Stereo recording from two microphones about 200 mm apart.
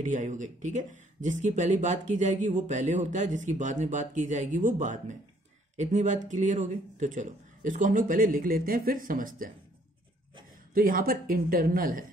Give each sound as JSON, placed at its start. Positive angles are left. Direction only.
{"t": 0.0, "sound": "a woman's voice", "side_deg": -40}
{"t": 10.7, "sound": "a woman's voice", "side_deg": -45}